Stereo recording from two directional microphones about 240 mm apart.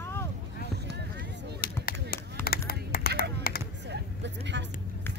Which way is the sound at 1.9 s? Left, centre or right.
Left.